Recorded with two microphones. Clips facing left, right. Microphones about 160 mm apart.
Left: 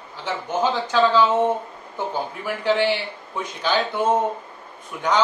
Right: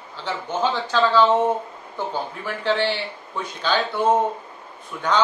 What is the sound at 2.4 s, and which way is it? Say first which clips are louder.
Speech: left 2 dB; 15° left (ahead or behind).